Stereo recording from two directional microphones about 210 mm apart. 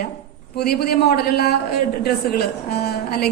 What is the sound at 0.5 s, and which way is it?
A woman's voice, 45° left (ahead or behind).